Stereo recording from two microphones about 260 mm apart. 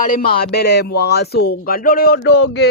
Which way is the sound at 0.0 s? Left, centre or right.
Left.